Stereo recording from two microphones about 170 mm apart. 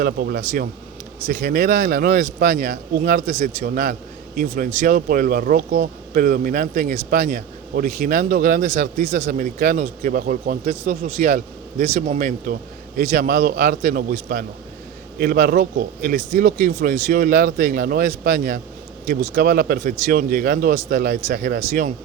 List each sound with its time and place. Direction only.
0.0 s speech: 60° right (ahead or behind)